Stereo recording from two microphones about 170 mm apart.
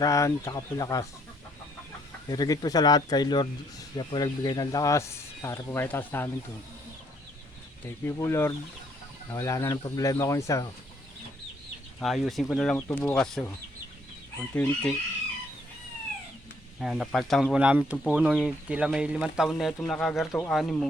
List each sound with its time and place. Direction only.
0.0 s speech: 20° left (ahead or behind)
2.3 s speech: 25° left (ahead or behind)
8.0 s speech: 15° left (ahead or behind)
11.9 s speech: centre (ahead or behind)
14.5 s speech: 5° left (ahead or behind)
16.8 s speech: centre (ahead or behind)